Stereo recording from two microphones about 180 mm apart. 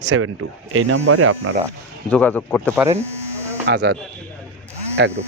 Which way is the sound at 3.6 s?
65° right (ahead or behind).